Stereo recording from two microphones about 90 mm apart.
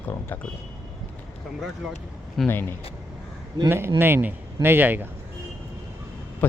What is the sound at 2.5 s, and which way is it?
Speech, 25° left (ahead or behind).